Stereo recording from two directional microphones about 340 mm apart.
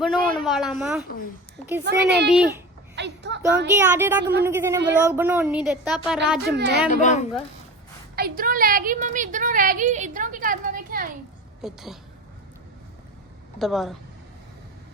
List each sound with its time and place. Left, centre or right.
0.0 s speech: centre
1.8 s speech: right
3.8 s a woman's voice: centre
6.4 s speech: right
6.9 s speech: left
8.1 s a woman's voice: right
11.6 s speech: centre
13.6 s speech: centre